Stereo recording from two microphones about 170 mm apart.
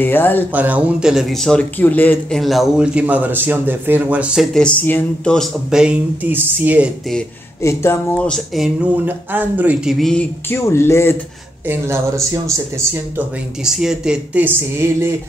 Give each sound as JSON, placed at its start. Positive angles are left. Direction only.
{"t": 0.0, "sound": "speech", "side_deg": 10}
{"t": 0.5, "sound": "speech", "side_deg": -10}
{"t": 2.4, "sound": "a man's voice", "side_deg": 0}
{"t": 7.6, "sound": "speech", "side_deg": 15}
{"t": 10.5, "sound": "speech", "side_deg": 15}
{"t": 11.6, "sound": "a man's voice", "side_deg": -15}
{"t": 13.7, "sound": "a man's voice", "side_deg": -5}